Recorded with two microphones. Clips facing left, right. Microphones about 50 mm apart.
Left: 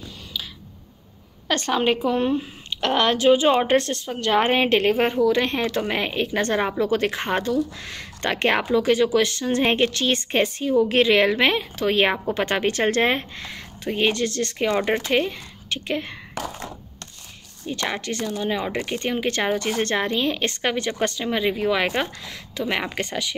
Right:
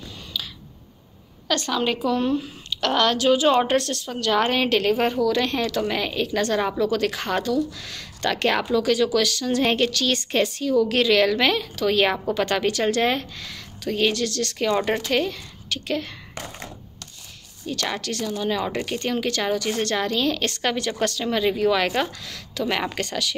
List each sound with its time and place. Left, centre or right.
1.5 s a woman's voice: left
17.6 s speech: left